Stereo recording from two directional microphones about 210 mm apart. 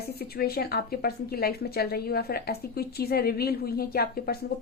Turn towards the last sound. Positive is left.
turn(degrees=45)  # may be behind; listen again after turning